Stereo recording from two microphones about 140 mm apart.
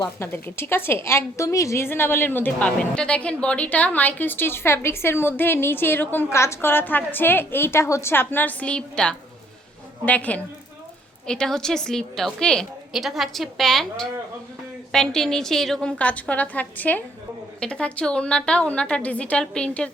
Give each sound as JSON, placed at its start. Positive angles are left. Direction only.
{"t": 0.0, "sound": "a woman's voice", "side_deg": 15}